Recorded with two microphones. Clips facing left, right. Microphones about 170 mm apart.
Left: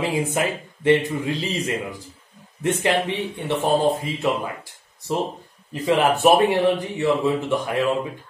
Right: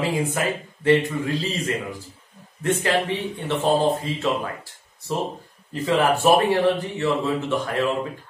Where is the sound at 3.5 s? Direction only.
15° left (ahead or behind).